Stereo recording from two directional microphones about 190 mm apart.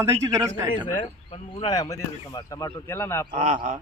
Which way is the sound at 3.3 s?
40° right (ahead or behind).